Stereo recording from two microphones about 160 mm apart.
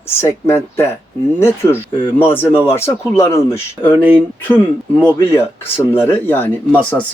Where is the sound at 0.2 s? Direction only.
15° left (ahead or behind).